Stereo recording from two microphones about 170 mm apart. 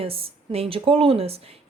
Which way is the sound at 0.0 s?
35° right (ahead or behind).